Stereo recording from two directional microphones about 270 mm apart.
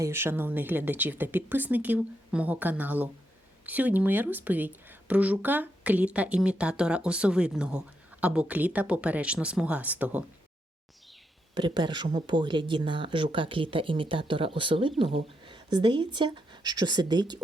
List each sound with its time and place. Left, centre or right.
0.0 s speech: centre
11.5 s speech: centre